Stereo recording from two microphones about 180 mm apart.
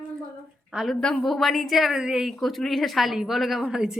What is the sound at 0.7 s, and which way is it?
A woman's voice, centre (ahead or behind).